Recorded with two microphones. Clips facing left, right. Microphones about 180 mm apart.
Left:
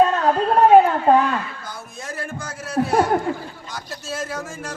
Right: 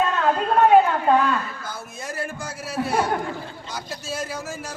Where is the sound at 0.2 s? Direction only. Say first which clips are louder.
Left 2 dB; 40° left (ahead or behind).